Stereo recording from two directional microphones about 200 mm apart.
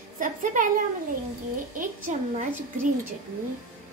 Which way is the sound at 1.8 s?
40° right (ahead or behind).